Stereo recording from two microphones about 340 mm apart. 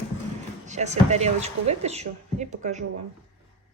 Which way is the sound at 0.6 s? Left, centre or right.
Centre.